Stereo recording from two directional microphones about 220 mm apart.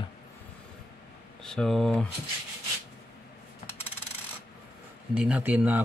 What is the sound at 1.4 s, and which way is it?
Speech, 5° left (ahead or behind).